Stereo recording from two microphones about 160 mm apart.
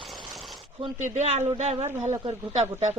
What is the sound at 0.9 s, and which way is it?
Speech, 50° right (ahead or behind).